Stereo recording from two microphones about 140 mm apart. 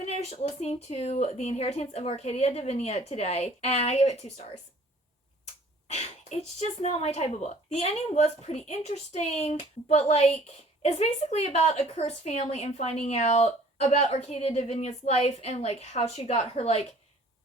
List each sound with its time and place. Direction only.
0.0 s speech: 50° left (ahead or behind)
5.9 s speech: 55° left (ahead or behind)